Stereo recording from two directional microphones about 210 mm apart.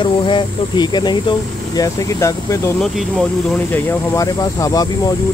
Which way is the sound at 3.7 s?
15° left (ahead or behind).